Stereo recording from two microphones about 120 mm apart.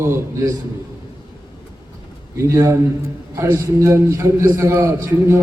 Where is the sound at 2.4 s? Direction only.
25° right (ahead or behind).